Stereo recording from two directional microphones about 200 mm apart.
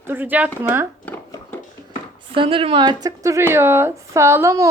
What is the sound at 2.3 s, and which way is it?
Speech, 25° right (ahead or behind).